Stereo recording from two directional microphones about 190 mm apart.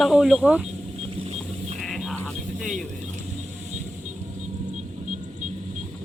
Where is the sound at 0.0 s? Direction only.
Centre (ahead or behind).